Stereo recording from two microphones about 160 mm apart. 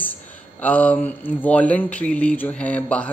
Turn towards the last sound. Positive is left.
turn(degrees=10)  # may be behind; listen again after turning